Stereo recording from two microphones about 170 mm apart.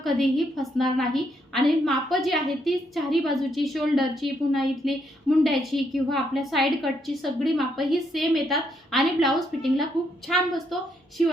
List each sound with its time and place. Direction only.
0.0 s a woman's voice: centre (ahead or behind)